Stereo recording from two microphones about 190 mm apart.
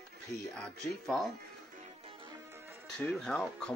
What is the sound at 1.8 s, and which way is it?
Music, 30° right (ahead or behind).